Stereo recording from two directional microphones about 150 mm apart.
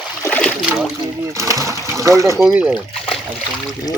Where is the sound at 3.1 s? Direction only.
Centre (ahead or behind).